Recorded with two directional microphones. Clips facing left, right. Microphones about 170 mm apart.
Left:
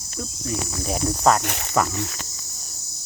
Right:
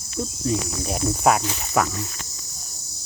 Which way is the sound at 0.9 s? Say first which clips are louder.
Left 1 dB; 5° right (ahead or behind).